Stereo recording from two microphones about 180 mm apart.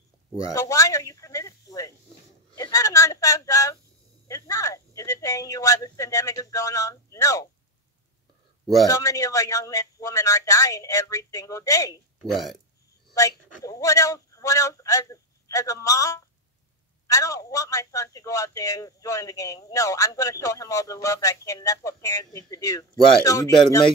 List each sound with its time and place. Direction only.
0.5 s speech: 20° left (ahead or behind)
2.5 s a sound: 20° left (ahead or behind)
4.3 s speech: 20° left (ahead or behind)
8.8 s a man's voice: 20° left (ahead or behind)
12.2 s speech: centre (ahead or behind)
13.1 s a man's voice: 20° left (ahead or behind)